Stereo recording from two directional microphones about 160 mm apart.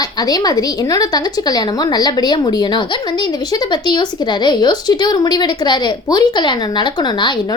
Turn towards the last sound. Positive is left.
turn(degrees=30)  # may be behind; listen again after turning